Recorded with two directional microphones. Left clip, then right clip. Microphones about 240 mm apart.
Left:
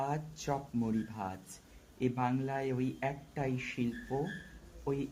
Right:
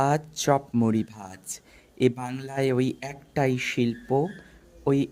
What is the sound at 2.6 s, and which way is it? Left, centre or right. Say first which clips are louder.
Speech: right 10 dB; right.